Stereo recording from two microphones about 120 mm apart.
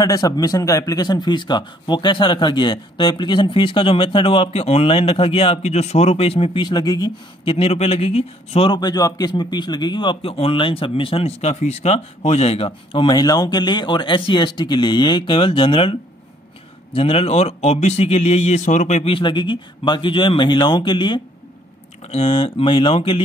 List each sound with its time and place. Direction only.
0.0 s a man's voice: 30° left (ahead or behind)
7.4 s speech: 55° left (ahead or behind)
8.7 s a man's voice: 35° left (ahead or behind); by 13.0 s 50° left (ahead or behind)
13.0 s a man's voice: 35° left (ahead or behind); by 19.0 s 80° left
19.0 s a man's voice: 45° left (ahead or behind)
22.0 s a man's voice: 55° left (ahead or behind)